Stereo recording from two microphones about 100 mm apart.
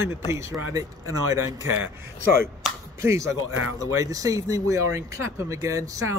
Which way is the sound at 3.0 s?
30° right (ahead or behind).